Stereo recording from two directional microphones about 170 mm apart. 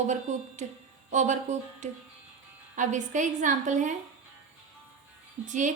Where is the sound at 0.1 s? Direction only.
45° right (ahead or behind).